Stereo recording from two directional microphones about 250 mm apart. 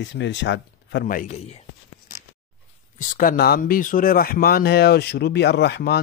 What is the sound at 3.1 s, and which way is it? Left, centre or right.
Speech, left.